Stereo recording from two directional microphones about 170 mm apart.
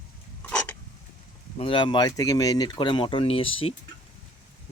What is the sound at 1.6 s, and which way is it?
Speech, 30° left (ahead or behind).